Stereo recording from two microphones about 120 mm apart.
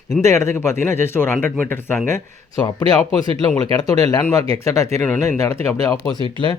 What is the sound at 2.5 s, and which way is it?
Speech, 35° left (ahead or behind).